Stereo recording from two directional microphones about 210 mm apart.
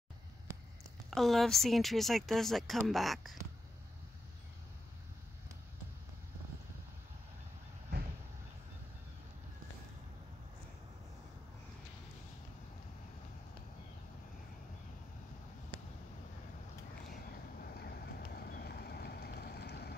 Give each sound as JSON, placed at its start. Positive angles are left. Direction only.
{"t": 1.1, "sound": "speech", "side_deg": 0}
{"t": 17.1, "sound": "vehicle", "side_deg": 45}